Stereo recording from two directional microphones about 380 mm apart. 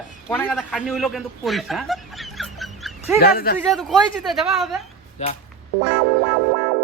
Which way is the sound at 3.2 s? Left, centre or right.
Left.